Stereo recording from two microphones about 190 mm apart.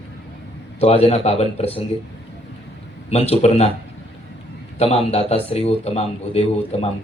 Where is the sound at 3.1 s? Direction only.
35° left (ahead or behind).